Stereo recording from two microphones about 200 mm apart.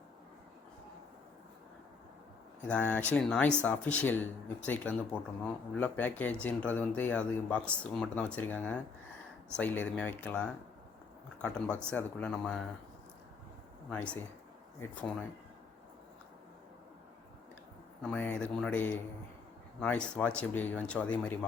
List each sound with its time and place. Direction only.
2.6 s speech: 5° left (ahead or behind)
13.9 s speech: 5° left (ahead or behind)
18.0 s speech: 5° left (ahead or behind)